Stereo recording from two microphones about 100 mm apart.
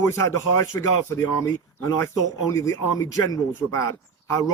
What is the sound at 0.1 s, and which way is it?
Speech, 30° left (ahead or behind).